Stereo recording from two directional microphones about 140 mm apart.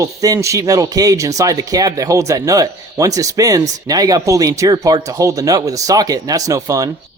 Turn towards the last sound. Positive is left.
turn(degrees=-25)  # may be behind; listen again after turning